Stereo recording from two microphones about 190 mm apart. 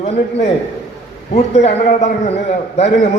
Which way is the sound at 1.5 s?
35° left (ahead or behind).